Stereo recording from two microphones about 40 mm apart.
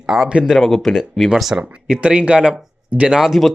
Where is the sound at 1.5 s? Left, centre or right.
Right.